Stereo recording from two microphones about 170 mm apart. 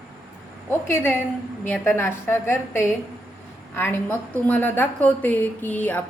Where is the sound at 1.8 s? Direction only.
15° left (ahead or behind).